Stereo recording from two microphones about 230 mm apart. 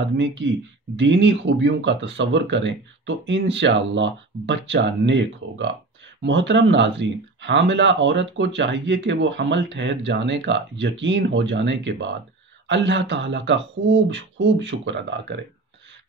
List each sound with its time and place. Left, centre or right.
0.0 s speech: right